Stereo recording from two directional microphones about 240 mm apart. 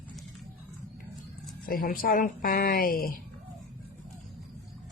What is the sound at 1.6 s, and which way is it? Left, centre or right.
Speech, left.